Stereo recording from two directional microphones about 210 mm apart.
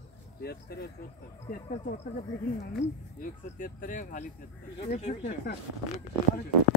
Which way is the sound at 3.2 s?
40° left (ahead or behind).